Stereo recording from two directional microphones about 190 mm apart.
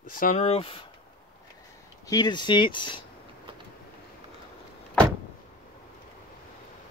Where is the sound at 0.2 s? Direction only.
35° left (ahead or behind).